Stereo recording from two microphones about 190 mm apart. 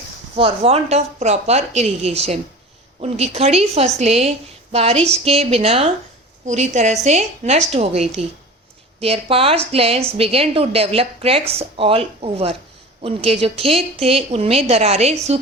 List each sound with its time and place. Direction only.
0.3 s a woman's voice: 30° right (ahead or behind)